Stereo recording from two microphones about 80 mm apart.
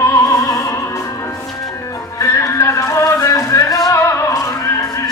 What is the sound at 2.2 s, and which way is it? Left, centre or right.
Music, left.